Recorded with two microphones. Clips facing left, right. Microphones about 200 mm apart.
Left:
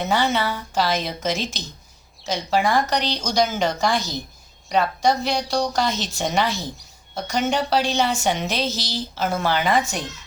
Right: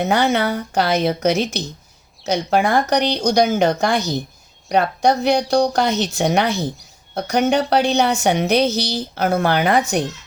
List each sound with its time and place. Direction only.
0.0 s a woman's voice: 55° right (ahead or behind)